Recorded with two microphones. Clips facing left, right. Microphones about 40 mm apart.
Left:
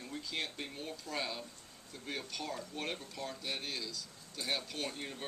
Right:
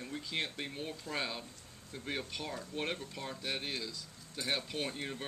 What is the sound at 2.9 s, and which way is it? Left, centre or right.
Speech, centre.